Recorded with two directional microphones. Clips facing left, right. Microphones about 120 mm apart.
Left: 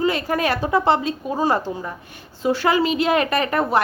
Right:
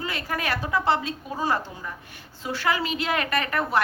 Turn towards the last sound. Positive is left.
turn(degrees=25)  # may be behind; listen again after turning